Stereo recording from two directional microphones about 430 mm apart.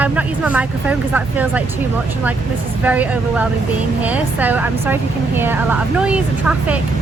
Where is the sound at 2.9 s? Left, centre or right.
Centre.